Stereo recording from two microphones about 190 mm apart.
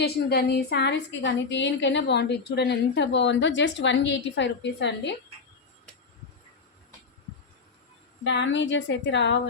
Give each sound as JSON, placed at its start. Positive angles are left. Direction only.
{"t": 0.0, "sound": "a woman's voice", "side_deg": 60}
{"t": 8.2, "sound": "a woman's voice", "side_deg": 70}